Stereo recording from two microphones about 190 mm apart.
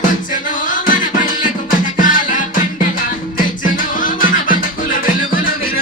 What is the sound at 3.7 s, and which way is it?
Music, 45° left (ahead or behind).